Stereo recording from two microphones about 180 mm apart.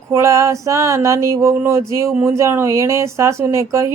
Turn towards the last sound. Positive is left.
turn(degrees=-15)  # may be behind; listen again after turning